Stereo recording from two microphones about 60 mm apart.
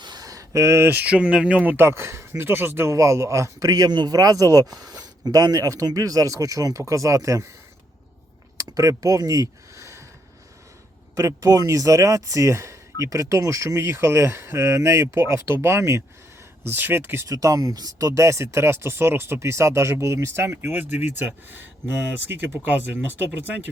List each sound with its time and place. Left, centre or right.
0.2 s a sound: right
0.9 s speech: right
1.1 s speech: centre
1.7 s speech: right
2.9 s speech: right
8.5 s speech: right
9.7 s a sound: right
11.3 s speech: right
16.6 s speech: right
17.2 s speech: right